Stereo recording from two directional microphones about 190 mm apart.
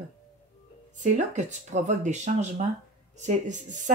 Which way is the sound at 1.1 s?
40° right (ahead or behind).